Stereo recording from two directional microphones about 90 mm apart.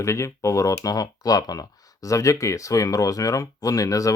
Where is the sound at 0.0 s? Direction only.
35° left (ahead or behind).